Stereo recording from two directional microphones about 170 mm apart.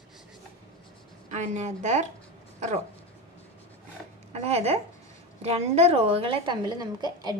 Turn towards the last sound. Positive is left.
turn(degrees=-25)  # may be behind; listen again after turning